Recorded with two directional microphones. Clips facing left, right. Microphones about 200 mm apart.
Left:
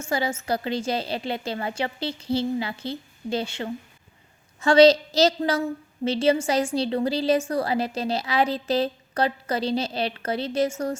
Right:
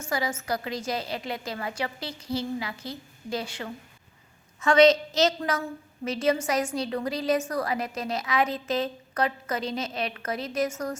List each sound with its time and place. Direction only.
0.1 s a woman's voice: 25° left (ahead or behind)